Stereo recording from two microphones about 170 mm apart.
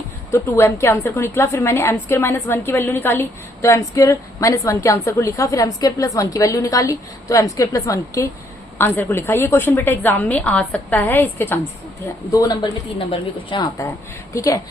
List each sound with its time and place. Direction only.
0.3 s a woman's voice: 15° left (ahead or behind)
12.3 s a woman's voice: 25° left (ahead or behind)